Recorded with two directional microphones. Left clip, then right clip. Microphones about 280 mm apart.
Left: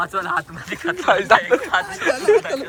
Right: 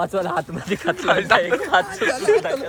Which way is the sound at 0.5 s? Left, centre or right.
Right.